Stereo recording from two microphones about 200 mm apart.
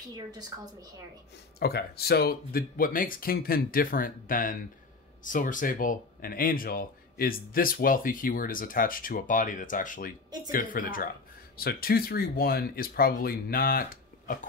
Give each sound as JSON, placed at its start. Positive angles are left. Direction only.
{"t": 0.1, "sound": "a woman's voice", "side_deg": -20}
{"t": 1.6, "sound": "speech", "side_deg": 50}